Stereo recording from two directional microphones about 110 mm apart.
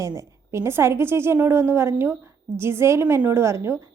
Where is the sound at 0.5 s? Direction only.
25° right (ahead or behind).